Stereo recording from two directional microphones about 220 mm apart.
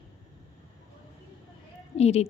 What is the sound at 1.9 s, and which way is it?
Speech, 30° left (ahead or behind).